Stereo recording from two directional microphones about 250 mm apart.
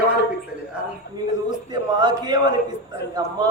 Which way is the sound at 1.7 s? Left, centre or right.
Centre.